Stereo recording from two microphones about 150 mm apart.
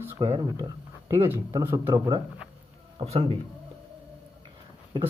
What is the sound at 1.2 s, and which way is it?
Speech, 15° right (ahead or behind).